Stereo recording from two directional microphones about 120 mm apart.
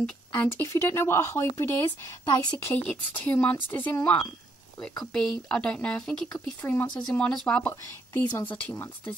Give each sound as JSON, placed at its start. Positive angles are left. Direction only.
{"t": 0.4, "sound": "speech", "side_deg": 20}
{"t": 2.7, "sound": "speech", "side_deg": 15}
{"t": 6.6, "sound": "speech", "side_deg": 20}
{"t": 7.0, "sound": "speech", "side_deg": 5}